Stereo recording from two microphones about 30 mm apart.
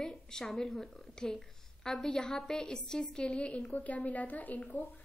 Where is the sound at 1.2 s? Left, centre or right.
Left.